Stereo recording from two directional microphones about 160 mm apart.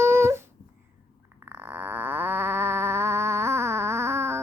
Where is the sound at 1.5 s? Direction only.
10° right (ahead or behind).